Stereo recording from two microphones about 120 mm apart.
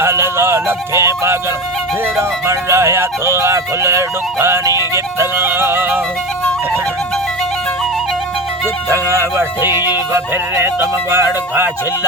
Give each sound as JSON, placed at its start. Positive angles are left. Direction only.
{"t": 0.0, "sound": "music", "side_deg": -20}
{"t": 2.5, "sound": "speech", "side_deg": -25}
{"t": 8.9, "sound": "speech", "side_deg": -25}
{"t": 11.1, "sound": "speech", "side_deg": -20}